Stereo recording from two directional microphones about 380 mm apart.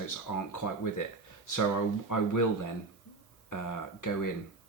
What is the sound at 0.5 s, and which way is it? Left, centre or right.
Speech, left.